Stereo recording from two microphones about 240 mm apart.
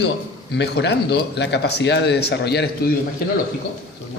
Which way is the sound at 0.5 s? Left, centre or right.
Left.